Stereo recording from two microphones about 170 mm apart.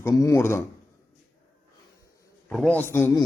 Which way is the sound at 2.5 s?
5° left (ahead or behind).